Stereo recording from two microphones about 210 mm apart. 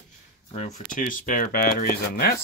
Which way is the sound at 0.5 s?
35° left (ahead or behind).